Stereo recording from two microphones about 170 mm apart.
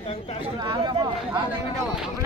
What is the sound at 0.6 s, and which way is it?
Chatter, 25° right (ahead or behind).